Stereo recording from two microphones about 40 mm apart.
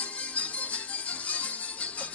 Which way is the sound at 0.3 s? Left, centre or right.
Left.